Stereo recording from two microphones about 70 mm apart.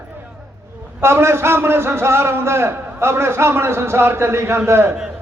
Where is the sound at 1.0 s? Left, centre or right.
Right.